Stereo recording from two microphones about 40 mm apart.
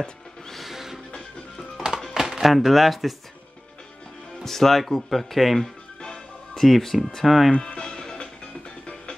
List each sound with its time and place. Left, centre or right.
0.5 s music: centre
2.1 s speech: centre
4.4 s speech: centre
5.9 s music: centre
6.5 s speech: centre
7.6 s music: centre